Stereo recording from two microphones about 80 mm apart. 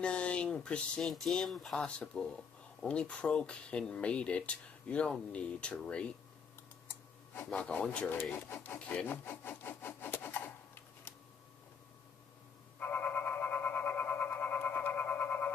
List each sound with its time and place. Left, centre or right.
0.0 s speech: centre
1.0 s speech: centre
7.4 s speech: centre
8.5 s rub: left
12.7 s a sound: left